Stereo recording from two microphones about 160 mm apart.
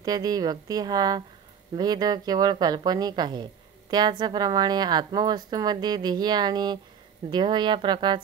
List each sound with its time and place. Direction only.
0.0 s a woman's voice: 25° right (ahead or behind)